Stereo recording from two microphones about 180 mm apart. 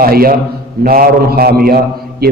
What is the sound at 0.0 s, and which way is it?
A man's voice, 55° right (ahead or behind).